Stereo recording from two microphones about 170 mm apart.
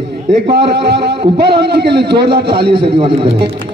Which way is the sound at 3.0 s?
30° right (ahead or behind).